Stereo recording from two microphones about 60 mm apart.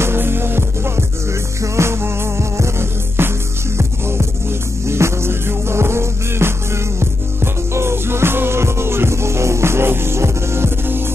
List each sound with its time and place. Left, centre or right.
0.0 s music: right